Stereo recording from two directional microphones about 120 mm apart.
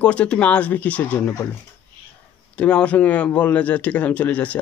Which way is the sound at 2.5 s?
10° left (ahead or behind).